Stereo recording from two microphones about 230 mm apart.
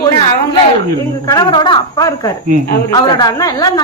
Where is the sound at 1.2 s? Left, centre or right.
Centre.